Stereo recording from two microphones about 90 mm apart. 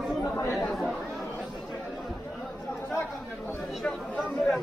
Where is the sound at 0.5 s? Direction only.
Centre (ahead or behind).